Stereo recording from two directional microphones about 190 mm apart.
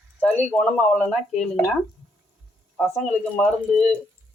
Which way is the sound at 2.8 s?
5° left (ahead or behind).